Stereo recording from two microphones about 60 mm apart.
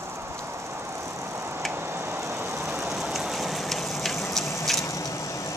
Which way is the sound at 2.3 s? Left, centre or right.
Right.